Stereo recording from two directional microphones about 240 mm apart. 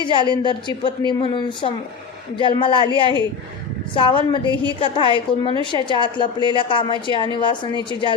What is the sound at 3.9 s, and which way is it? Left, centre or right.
Speech, left.